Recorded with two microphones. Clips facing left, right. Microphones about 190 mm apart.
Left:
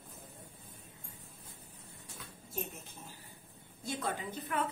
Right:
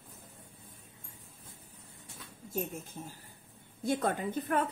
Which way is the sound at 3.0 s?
25° right (ahead or behind).